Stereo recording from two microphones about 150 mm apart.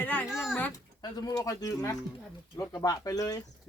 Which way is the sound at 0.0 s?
10° left (ahead or behind).